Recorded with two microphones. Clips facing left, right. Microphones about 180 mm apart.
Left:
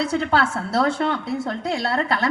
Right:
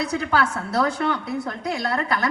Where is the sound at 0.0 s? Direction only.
30° left (ahead or behind).